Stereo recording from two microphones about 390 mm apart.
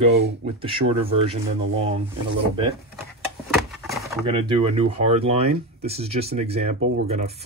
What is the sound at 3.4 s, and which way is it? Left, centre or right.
Speech, centre.